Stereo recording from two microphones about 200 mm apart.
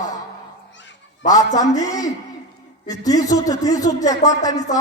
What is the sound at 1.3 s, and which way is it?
A woman's voice, 20° left (ahead or behind).